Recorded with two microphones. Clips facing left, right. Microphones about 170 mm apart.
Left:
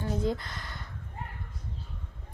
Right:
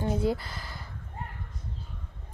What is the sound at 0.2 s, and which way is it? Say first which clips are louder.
Speech: right 2 dB; 5° right (ahead or behind).